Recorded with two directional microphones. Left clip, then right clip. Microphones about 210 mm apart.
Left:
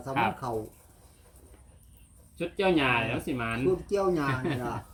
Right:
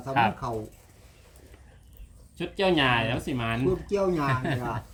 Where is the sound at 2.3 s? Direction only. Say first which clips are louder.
Right 2 dB; 45° right (ahead or behind).